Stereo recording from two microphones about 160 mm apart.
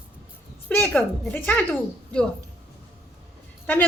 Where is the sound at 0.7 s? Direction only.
10° left (ahead or behind).